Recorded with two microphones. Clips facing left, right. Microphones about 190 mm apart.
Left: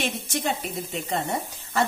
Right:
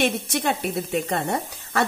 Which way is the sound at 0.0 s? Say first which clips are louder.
Right 5 dB; 65° right (ahead or behind).